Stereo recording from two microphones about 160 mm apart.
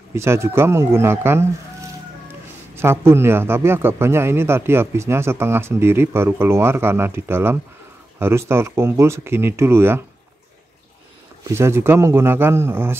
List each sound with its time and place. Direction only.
0.1 s a man's voice: 15° right (ahead or behind)
2.7 s a man's voice: 15° right (ahead or behind)
11.4 s a man's voice: 15° right (ahead or behind)